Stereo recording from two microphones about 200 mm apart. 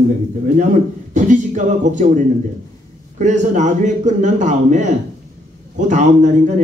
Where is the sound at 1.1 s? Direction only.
40° right (ahead or behind).